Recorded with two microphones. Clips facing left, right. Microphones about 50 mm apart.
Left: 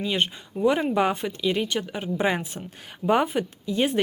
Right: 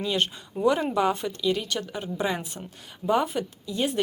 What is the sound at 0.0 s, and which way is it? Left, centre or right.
Speech, centre.